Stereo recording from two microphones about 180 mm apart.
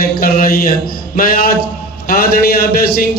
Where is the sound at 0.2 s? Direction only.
55° left (ahead or behind).